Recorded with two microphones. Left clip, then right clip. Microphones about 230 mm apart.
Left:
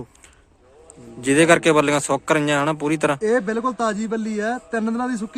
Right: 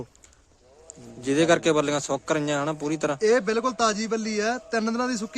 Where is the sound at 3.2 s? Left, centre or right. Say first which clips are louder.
Left 1 dB; right.